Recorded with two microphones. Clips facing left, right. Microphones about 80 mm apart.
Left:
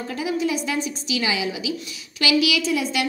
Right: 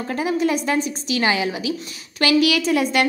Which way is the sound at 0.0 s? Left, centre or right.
Right.